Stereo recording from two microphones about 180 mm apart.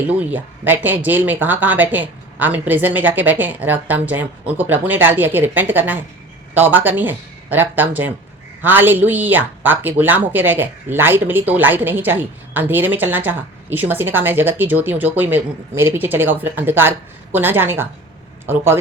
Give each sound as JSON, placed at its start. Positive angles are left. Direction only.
{"t": 0.1, "sound": "speech", "side_deg": -10}